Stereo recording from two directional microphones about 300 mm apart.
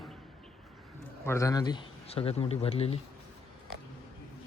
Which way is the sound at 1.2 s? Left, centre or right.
Centre.